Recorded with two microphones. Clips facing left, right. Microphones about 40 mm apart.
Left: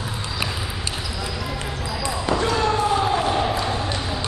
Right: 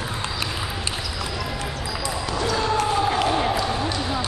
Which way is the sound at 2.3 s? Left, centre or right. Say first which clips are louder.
Left 4 dB; left.